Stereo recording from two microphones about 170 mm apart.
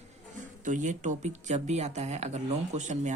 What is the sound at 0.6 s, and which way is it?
Speech, 45° right (ahead or behind).